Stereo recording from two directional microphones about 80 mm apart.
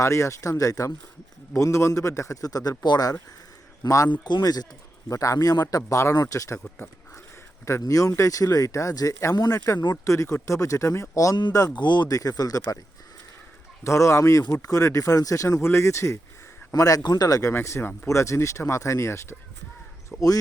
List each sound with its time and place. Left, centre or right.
0.0 s speech: left
3.8 s speech: left
4.2 s speech: left
5.0 s speech: left
7.8 s speech: left
11.8 s speech: left
12.0 s speech: left
13.8 s speech: left
16.7 s speech: left
17.5 s speech: left